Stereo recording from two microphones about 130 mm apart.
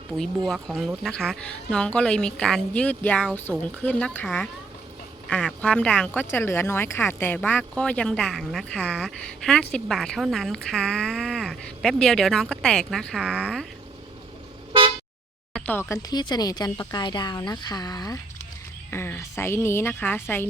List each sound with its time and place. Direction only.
0.2 s a woman's voice: centre (ahead or behind)
5.3 s a woman's voice: 5° left (ahead or behind)
13.2 s speech: 5° right (ahead or behind)
15.5 s speech: 15° left (ahead or behind)
16.1 s speech: 30° left (ahead or behind)
18.9 s a woman's voice: 20° left (ahead or behind)